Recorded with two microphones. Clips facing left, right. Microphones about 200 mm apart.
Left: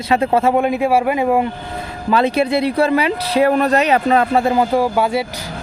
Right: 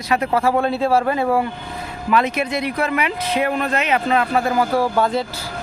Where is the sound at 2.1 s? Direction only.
30° left (ahead or behind).